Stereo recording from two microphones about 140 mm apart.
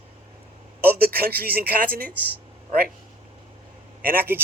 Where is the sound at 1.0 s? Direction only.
90° right.